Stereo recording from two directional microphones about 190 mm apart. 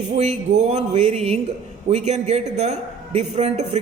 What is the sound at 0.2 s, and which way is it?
A man's voice, 35° right (ahead or behind).